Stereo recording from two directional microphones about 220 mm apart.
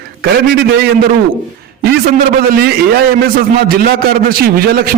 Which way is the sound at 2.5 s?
45° right (ahead or behind).